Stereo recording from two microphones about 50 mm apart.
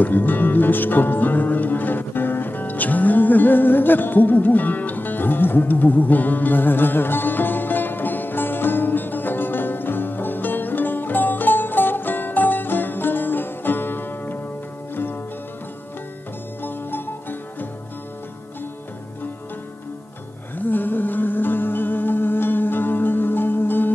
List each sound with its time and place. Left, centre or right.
0.0 s music: left
16.6 s music: left
20.5 s music: left